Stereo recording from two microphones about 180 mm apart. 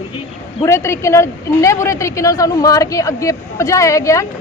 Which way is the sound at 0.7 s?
15° left (ahead or behind).